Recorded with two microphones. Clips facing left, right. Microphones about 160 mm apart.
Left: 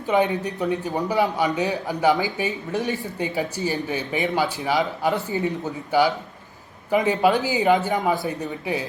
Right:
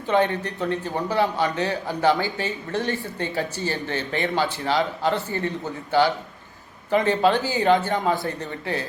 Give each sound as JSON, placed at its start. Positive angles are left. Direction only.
{"t": 0.1, "sound": "speech", "side_deg": 10}